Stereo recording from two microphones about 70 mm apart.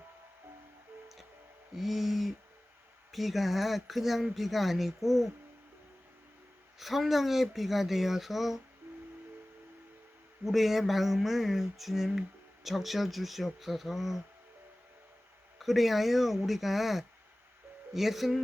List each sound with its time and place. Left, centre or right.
1.7 s speech: centre
6.7 s speech: centre
8.9 s music: right
10.4 s speech: centre
15.5 s speech: centre